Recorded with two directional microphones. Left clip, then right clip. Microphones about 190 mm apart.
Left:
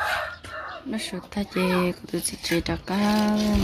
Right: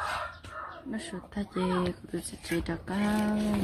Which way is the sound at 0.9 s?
15° left (ahead or behind).